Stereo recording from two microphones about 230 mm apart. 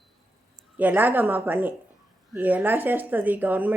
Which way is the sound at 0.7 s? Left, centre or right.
Centre.